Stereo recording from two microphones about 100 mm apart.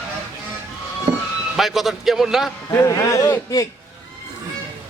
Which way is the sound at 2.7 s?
30° left (ahead or behind).